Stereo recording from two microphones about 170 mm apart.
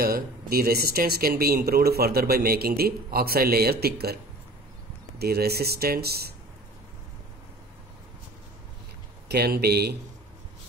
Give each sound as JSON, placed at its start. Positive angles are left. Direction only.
{"t": 0.0, "sound": "speech", "side_deg": -60}
{"t": 5.2, "sound": "speech", "side_deg": -70}
{"t": 9.3, "sound": "speech", "side_deg": -70}